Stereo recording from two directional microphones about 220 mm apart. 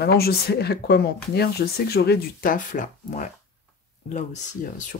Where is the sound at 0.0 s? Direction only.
45° left (ahead or behind).